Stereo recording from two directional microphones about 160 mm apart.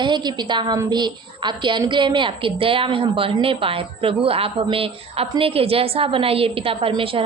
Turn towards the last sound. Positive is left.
turn(degrees=-35)  # may be behind; listen again after turning